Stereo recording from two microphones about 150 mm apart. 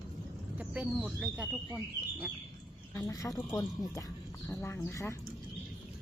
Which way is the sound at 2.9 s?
25° left (ahead or behind).